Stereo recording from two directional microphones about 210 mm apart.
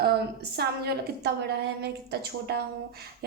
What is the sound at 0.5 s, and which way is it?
A woman's voice, 50° right (ahead or behind).